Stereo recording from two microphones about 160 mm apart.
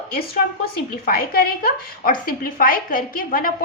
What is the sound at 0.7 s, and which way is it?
A woman's voice, 70° left (ahead or behind).